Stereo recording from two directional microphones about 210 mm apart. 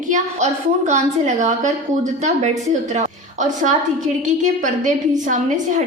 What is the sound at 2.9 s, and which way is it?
A woman's voice, 35° right (ahead or behind).